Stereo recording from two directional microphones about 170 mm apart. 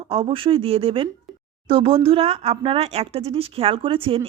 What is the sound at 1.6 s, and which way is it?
A woman's voice, 35° right (ahead or behind).